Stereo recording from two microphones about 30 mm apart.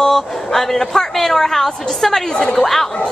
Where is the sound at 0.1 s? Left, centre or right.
Centre.